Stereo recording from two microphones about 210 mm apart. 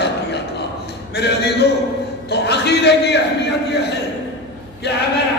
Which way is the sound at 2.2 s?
55° left (ahead or behind).